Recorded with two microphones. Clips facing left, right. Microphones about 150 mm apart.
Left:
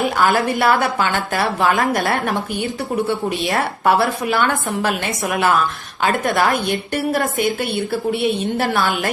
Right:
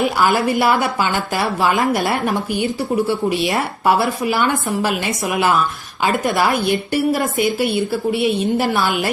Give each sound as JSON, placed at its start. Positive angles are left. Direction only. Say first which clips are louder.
{"t": 0.2, "sound": "a woman's voice", "louder": "left 1 dB", "side_deg": -5}